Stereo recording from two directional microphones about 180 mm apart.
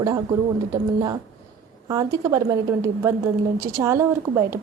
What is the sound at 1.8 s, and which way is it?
Speech, 20° right (ahead or behind).